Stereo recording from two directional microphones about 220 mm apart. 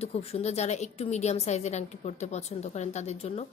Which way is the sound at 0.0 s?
30° left (ahead or behind).